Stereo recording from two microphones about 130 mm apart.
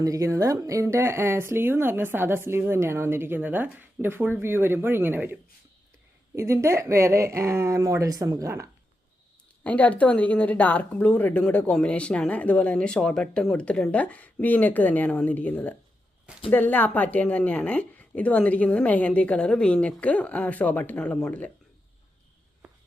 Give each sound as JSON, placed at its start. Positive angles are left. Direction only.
{"t": 0.0, "sound": "speech", "side_deg": -25}
{"t": 9.6, "sound": "speech", "side_deg": 10}